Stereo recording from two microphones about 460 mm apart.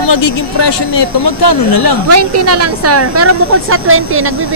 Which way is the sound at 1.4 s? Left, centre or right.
Left.